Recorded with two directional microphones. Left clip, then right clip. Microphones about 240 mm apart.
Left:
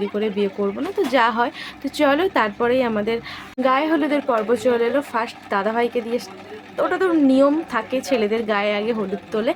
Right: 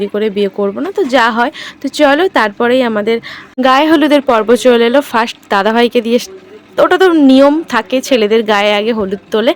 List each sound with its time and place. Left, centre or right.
0.1 s speech: right
3.6 s speech: right